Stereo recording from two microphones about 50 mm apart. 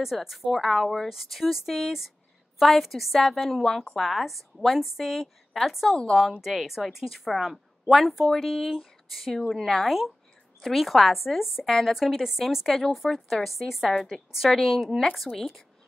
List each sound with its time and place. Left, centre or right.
0.0 s speech: centre
5.1 s a woman's voice: centre